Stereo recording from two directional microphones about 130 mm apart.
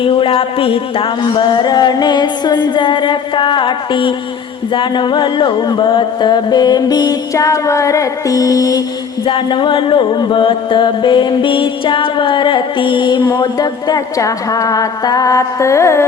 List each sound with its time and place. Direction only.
0.0 s music: 45° left (ahead or behind); by 8.8 s 25° left (ahead or behind)
9.2 s music: 40° left (ahead or behind); by 16.0 s 20° left (ahead or behind)